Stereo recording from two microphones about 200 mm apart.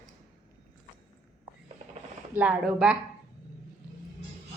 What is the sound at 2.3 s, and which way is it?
Speech, 5° right (ahead or behind).